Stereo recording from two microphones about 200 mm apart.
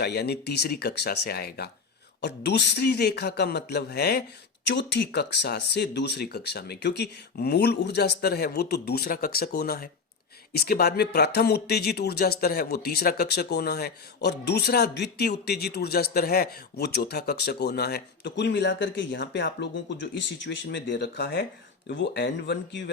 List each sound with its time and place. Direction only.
0.0 s speech: 55° left (ahead or behind)